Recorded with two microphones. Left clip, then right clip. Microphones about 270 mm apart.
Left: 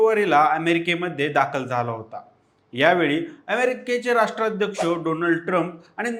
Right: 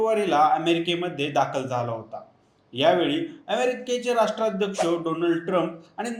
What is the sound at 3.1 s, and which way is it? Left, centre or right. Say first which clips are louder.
Speech: left 3 dB; left.